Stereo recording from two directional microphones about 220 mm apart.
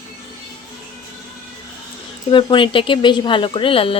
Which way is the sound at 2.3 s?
20° left (ahead or behind).